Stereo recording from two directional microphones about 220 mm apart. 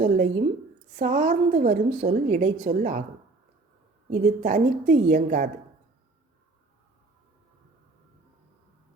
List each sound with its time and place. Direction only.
0.0 s a woman's voice: 35° right (ahead or behind)
1.9 s a woman's voice: 25° right (ahead or behind)
4.1 s a woman's voice: 35° right (ahead or behind)